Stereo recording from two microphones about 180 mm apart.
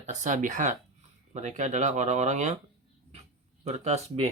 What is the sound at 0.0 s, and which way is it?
Speech, 40° right (ahead or behind).